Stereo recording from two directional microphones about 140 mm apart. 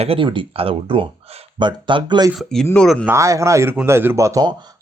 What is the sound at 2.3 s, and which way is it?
Speech, centre (ahead or behind).